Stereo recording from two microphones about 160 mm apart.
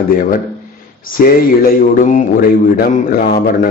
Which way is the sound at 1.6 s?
60° left (ahead or behind).